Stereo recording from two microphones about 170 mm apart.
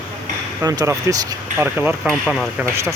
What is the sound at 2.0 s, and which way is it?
Speech, 5° left (ahead or behind).